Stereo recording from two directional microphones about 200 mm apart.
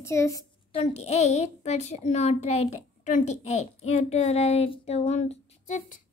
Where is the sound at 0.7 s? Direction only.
30° left (ahead or behind).